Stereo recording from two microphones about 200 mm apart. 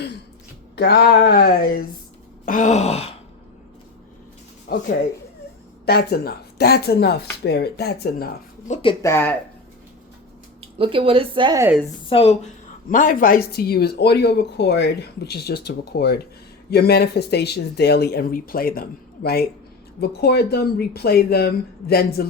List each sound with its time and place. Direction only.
0.8 s speech: 55° left (ahead or behind)
2.5 s a sound: 35° left (ahead or behind)
4.7 s speech: 45° left (ahead or behind)
8.6 s a sound: 30° left (ahead or behind)
9.0 s speech: 15° left (ahead or behind)
10.6 s speech: 25° right (ahead or behind)
12.0 s speech: 30° left (ahead or behind)
12.9 s speech: 40° left (ahead or behind)